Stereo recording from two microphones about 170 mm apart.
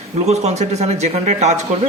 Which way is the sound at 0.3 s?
40° right (ahead or behind).